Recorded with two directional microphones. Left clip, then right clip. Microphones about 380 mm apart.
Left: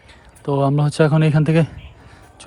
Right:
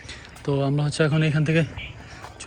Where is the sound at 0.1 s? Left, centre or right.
Centre.